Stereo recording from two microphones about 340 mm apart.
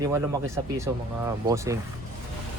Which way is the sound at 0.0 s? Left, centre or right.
Centre.